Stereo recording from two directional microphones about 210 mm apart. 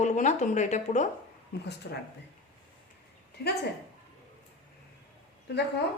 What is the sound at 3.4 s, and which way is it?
Speech, 50° left (ahead or behind).